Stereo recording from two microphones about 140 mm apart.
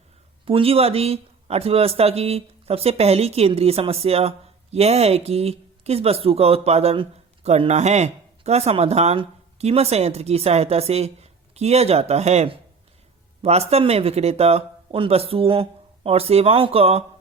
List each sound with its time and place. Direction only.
0.4 s speech: 40° right (ahead or behind)